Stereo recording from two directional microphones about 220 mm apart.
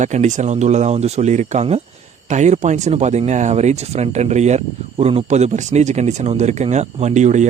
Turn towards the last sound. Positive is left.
turn(degrees=-30)  # may be behind; listen again after turning